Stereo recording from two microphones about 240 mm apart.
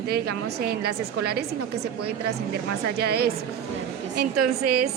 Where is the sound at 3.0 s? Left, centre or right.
Right.